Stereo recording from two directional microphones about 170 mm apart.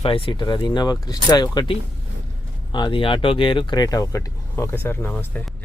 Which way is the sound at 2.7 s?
30° left (ahead or behind).